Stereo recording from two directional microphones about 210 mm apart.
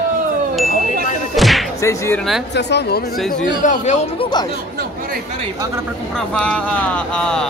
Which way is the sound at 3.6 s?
35° left (ahead or behind).